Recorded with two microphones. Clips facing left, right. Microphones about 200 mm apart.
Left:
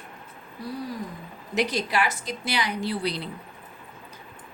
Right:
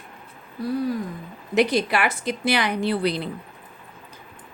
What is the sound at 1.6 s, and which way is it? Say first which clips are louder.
A woman's voice: right 5 dB; 60° right (ahead or behind).